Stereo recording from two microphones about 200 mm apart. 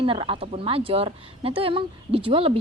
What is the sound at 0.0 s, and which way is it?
A woman's voice, 25° right (ahead or behind).